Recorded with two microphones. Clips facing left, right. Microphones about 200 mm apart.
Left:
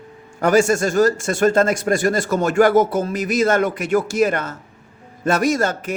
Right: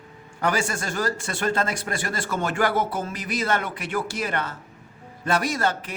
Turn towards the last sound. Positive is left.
turn(degrees=45)  # may be behind; listen again after turning